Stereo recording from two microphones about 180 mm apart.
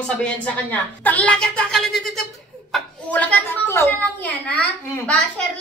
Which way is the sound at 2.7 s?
10° left (ahead or behind).